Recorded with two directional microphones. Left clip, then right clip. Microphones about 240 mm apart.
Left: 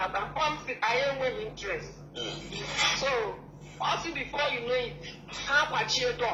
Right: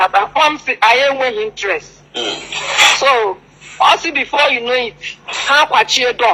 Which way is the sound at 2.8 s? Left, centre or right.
Right.